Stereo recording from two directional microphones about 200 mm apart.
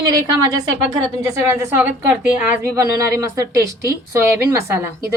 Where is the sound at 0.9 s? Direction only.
15° right (ahead or behind).